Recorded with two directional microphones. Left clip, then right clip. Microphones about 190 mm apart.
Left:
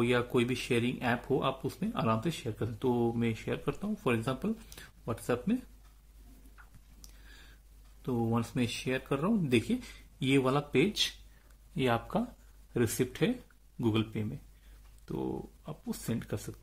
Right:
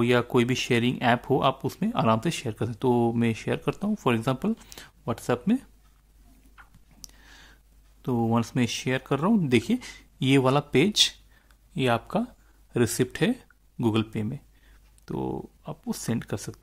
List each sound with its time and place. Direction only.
0.0 s speech: 35° right (ahead or behind)
6.5 s a sound: 35° right (ahead or behind)
8.0 s speech: 35° right (ahead or behind)